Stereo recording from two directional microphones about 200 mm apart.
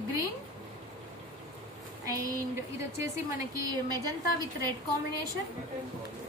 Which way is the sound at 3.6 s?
20° right (ahead or behind).